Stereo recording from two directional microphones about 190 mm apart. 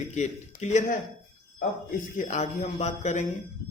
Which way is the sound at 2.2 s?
35° left (ahead or behind).